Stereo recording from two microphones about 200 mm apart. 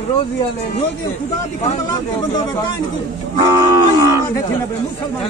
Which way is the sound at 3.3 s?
20° right (ahead or behind).